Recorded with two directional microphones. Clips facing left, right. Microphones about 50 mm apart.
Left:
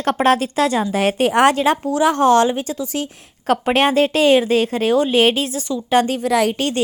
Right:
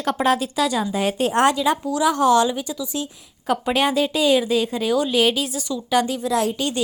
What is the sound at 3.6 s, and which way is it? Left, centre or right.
Speech, left.